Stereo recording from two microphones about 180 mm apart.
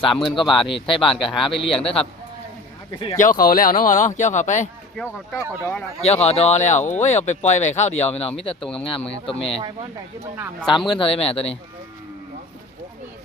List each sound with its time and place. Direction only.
0.0 s speech: 30° left (ahead or behind)
1.2 s speech: centre (ahead or behind)
1.5 s speech: 30° left (ahead or behind)
3.2 s speech: 50° left (ahead or behind)
4.9 s speech: 5° left (ahead or behind)
6.0 s speech: 35° left (ahead or behind)
10.7 s speech: 25° left (ahead or behind)